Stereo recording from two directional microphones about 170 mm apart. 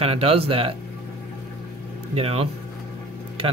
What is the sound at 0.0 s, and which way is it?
Speech, 35° right (ahead or behind).